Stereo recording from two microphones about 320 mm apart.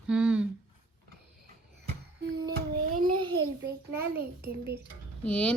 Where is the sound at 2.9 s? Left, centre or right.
Right.